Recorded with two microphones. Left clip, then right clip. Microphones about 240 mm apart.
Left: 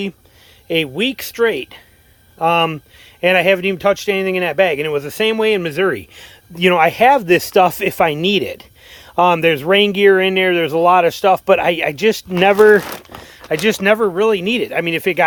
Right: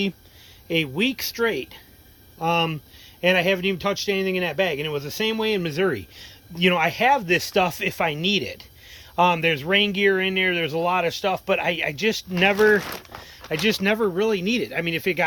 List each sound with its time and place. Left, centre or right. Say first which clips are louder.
0.7 s speech: left 6 dB; centre
13.2 s a sound: left 7 dB; centre
13.8 s speech: left 8 dB; centre